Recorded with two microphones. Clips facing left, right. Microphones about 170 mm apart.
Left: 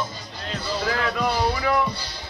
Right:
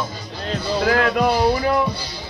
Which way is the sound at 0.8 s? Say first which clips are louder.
Right 7 dB; 65° right (ahead or behind).